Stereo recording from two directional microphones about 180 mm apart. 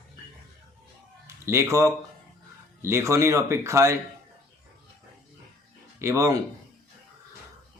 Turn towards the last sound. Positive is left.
turn(degrees=-15)  # may be behind; listen again after turning